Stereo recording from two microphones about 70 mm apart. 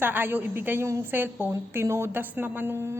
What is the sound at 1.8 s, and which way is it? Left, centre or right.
Speech, right.